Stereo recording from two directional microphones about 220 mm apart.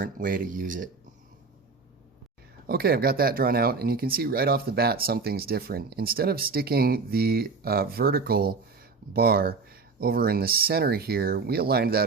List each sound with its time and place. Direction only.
0.0 s speech: 40° right (ahead or behind)
2.6 s speech: 45° right (ahead or behind)